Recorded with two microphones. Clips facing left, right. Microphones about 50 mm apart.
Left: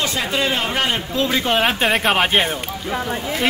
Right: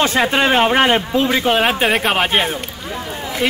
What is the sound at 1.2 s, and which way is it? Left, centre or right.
Speech, centre.